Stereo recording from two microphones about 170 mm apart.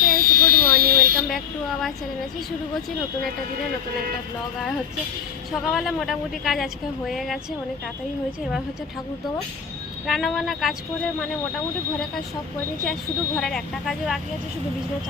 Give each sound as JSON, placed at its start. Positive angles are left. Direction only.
{"t": 0.1, "sound": "a sound", "side_deg": -55}
{"t": 5.5, "sound": "a woman's voice", "side_deg": 0}
{"t": 10.1, "sound": "a woman's voice", "side_deg": 0}
{"t": 12.8, "sound": "a woman's voice", "side_deg": 5}